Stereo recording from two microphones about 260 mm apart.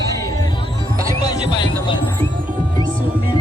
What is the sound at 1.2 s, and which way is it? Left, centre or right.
Music, centre.